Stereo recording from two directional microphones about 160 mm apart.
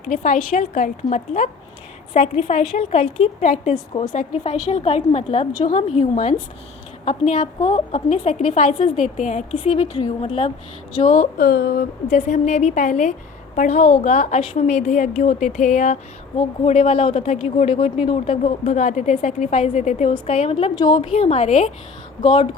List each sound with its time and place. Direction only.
0.0 s a woman's voice: 55° left (ahead or behind)
7.6 s a woman's voice: 45° left (ahead or behind)
9.7 s speech: 35° left (ahead or behind)
10.9 s a woman's voice: 50° left (ahead or behind)
11.4 s speech: 85° left
12.1 s a woman's voice: 45° left (ahead or behind)
16.6 s speech: 40° left (ahead or behind)
20.7 s speech: 25° left (ahead or behind); by 21.7 s 50° left (ahead or behind)